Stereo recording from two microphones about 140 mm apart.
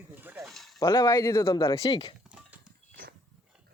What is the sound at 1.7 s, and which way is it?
Speech, 45° left (ahead or behind).